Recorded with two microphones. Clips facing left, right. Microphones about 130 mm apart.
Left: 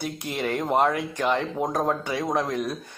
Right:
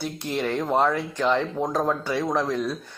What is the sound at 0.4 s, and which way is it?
Speech, 15° left (ahead or behind).